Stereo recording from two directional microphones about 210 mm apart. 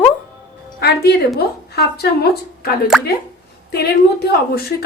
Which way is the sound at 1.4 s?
50° left (ahead or behind).